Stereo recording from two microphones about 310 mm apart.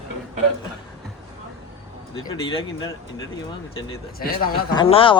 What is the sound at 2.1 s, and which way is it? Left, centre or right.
Speech, centre.